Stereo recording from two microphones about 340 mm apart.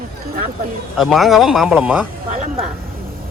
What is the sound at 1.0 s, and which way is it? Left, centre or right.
Speech, centre.